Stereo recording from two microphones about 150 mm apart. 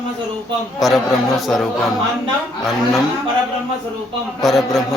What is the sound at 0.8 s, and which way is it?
Speech, centre (ahead or behind).